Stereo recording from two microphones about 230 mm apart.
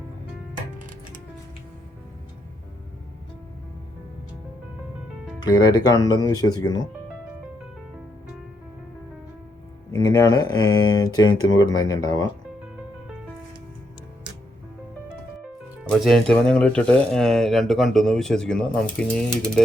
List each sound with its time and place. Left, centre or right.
5.5 s speech: centre
9.9 s speech: centre
11.3 s speech: left
11.5 s speech: centre
15.8 s speech: centre